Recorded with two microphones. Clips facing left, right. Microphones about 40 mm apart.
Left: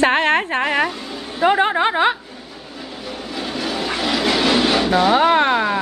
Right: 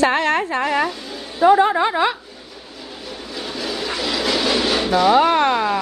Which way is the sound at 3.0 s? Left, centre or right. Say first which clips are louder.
Left 3 dB; left.